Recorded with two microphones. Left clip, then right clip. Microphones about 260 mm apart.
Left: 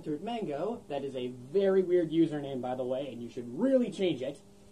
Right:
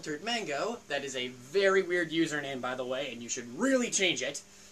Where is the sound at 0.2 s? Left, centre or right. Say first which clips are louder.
Right 6 dB; centre.